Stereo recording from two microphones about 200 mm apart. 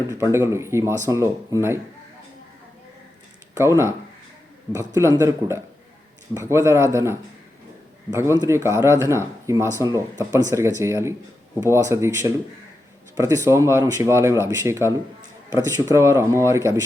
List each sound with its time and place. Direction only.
0.1 s speech: 15° right (ahead or behind)
3.6 s speech: 15° right (ahead or behind)